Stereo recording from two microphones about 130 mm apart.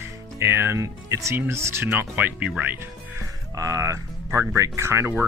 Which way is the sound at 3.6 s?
25° right (ahead or behind).